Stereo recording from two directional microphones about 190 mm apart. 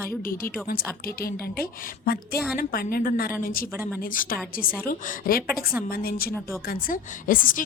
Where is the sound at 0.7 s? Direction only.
55° left (ahead or behind).